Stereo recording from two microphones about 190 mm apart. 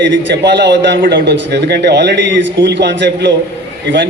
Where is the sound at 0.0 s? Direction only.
70° right (ahead or behind).